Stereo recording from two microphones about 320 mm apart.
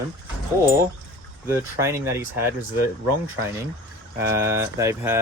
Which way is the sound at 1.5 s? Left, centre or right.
Centre.